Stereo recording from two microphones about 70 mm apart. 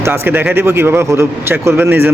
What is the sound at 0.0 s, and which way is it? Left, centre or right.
Speech, right.